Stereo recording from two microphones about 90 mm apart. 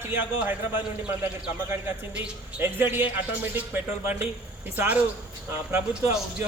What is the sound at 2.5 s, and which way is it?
A man's voice, 20° right (ahead or behind).